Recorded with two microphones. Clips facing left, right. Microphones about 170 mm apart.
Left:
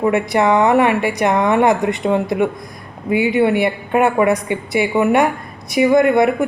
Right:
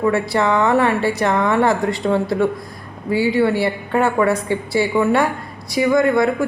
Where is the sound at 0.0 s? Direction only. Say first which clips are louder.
Left 2 dB; 20° left (ahead or behind).